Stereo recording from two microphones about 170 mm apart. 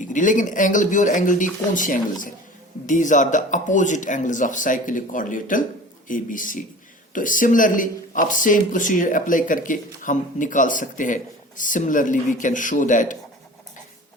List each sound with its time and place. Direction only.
0.0 s speech: 50° left (ahead or behind)